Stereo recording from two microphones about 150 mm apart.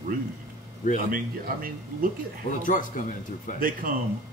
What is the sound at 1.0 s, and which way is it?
Speech, 65° right (ahead or behind).